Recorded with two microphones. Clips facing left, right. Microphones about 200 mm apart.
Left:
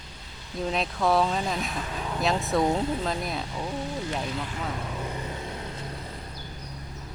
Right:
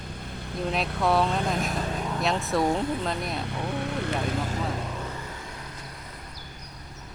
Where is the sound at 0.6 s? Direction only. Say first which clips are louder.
Even; centre (ahead or behind).